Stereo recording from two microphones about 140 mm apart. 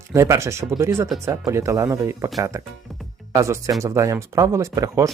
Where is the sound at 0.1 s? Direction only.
20° right (ahead or behind).